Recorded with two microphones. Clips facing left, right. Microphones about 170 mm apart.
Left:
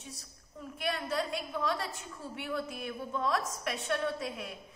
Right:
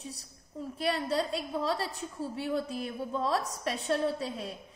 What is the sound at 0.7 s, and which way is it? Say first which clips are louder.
A woman's voice: right 4 dB; 30° right (ahead or behind).